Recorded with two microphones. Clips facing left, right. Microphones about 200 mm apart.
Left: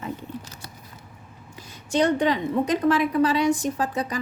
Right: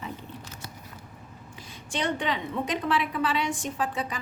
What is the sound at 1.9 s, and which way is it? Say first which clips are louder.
A woman's voice: left 8 dB; 40° left (ahead or behind).